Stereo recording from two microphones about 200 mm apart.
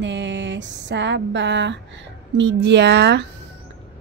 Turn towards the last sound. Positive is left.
turn(degrees=-60)  # may be behind; listen again after turning